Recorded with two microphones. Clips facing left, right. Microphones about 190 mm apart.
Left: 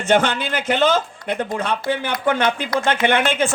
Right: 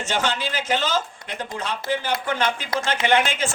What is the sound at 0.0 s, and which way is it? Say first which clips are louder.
A man's voice: left 7 dB; 55° left (ahead or behind).